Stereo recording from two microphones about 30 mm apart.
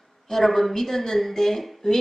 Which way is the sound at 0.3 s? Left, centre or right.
Centre.